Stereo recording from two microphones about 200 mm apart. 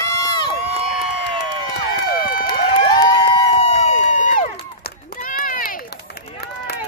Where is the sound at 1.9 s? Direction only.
50° left (ahead or behind).